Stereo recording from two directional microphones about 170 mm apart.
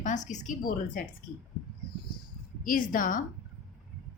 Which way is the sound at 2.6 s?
50° left (ahead or behind).